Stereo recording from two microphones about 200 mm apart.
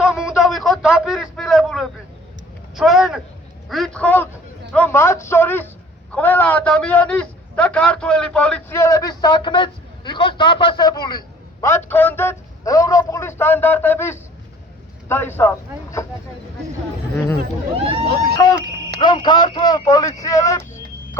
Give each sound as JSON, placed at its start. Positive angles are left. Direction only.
{"t": 0.0, "sound": "a sound", "side_deg": -5}
{"t": 2.7, "sound": "a man's voice", "side_deg": 0}
{"t": 17.7, "sound": "speech", "side_deg": -30}
{"t": 18.9, "sound": "a man's voice", "side_deg": 25}